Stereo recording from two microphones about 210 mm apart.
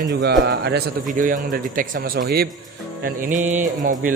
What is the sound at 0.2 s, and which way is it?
A man's voice, 50° right (ahead or behind).